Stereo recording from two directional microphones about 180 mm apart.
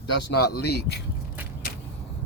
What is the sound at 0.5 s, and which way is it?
Speech, 65° left (ahead or behind).